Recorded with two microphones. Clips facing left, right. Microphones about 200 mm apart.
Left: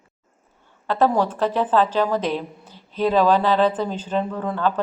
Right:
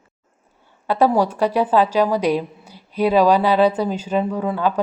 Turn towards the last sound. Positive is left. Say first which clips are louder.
# right 3 dB
turn(degrees=-10)  # may be behind; listen again after turning